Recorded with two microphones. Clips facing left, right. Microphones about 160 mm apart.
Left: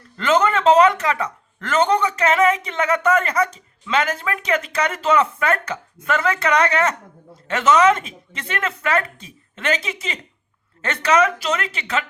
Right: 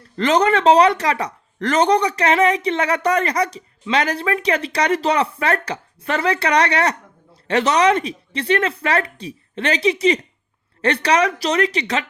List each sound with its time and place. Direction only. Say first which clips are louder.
0.2 s speech: right 2 dB; 35° right (ahead or behind)